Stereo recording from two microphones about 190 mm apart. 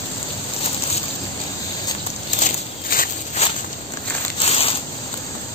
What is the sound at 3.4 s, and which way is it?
Walk, 35° left (ahead or behind).